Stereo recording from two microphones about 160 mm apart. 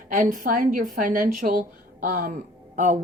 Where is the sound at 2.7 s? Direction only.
50° right (ahead or behind).